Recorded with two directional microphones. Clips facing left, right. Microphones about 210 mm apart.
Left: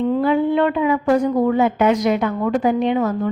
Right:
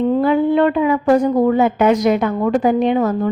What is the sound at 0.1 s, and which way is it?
A woman's voice, 40° right (ahead or behind).